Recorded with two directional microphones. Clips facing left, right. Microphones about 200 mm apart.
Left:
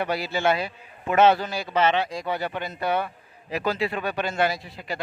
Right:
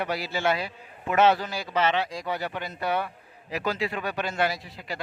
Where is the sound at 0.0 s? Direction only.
25° left (ahead or behind).